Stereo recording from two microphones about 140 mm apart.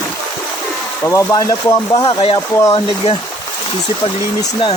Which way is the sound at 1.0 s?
20° left (ahead or behind).